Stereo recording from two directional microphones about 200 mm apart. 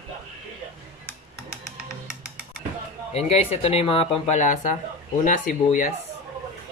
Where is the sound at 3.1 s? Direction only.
30° left (ahead or behind).